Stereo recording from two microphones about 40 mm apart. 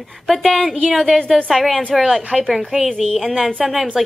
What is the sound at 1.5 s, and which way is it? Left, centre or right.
A woman's voice, centre.